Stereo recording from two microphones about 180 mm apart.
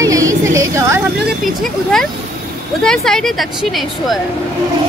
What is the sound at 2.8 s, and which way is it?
A woman's voice, 5° left (ahead or behind).